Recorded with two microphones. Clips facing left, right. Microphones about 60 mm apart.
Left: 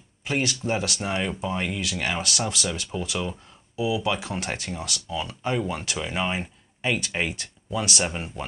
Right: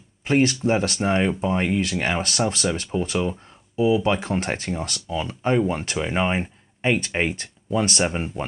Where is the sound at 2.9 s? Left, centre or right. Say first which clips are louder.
Right 6 dB; right.